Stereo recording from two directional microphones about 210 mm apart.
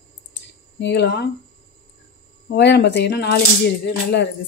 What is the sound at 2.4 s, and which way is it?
Speech, 55° left (ahead or behind).